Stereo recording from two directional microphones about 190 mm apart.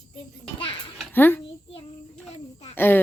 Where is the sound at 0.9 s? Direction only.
10° left (ahead or behind).